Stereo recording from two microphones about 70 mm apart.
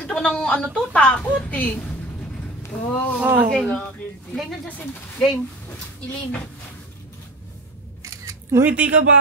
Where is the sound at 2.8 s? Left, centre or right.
Left.